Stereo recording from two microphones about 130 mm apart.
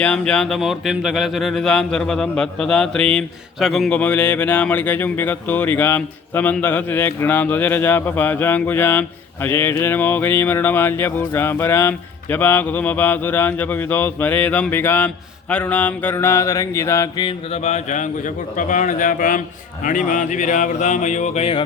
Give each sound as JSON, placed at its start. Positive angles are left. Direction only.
{"t": 0.0, "sound": "speech", "side_deg": 5}
{"t": 17.5, "sound": "speech", "side_deg": 60}